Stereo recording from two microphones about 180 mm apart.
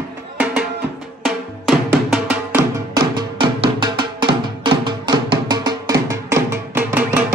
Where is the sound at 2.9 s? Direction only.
25° right (ahead or behind).